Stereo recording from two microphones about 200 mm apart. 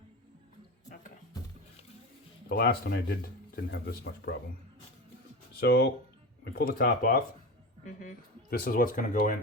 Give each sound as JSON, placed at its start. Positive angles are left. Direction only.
{"t": 2.5, "sound": "speech", "side_deg": 50}
{"t": 5.5, "sound": "speech", "side_deg": 50}
{"t": 8.4, "sound": "speech", "side_deg": 50}